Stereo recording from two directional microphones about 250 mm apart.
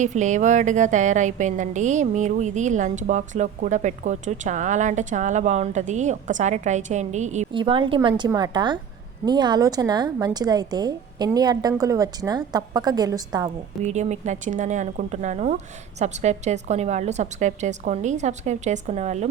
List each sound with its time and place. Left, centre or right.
0.0 s a woman's voice: right; by 13.5 s centre
13.8 s a woman's voice: right